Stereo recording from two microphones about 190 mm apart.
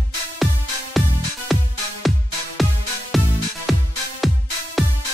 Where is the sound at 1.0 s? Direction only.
Centre (ahead or behind).